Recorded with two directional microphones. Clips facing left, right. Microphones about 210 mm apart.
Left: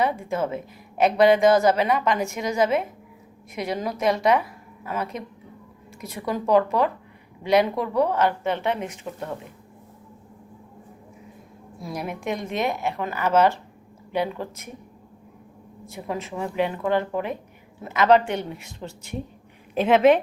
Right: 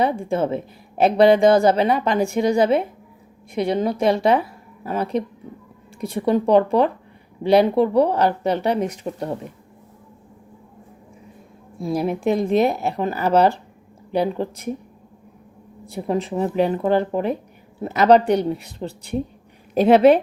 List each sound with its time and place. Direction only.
0.0 s a woman's voice: 30° right (ahead or behind)
11.8 s speech: 30° right (ahead or behind)
15.9 s speech: 35° right (ahead or behind)